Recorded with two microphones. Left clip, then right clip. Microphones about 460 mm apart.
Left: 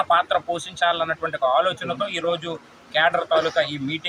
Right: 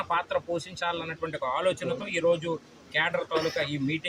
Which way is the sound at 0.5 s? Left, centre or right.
Right.